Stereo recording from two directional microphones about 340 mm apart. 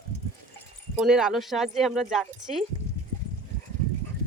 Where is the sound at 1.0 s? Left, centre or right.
Centre.